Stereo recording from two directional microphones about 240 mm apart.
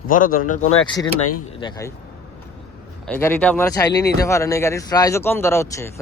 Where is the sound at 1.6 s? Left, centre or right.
Centre.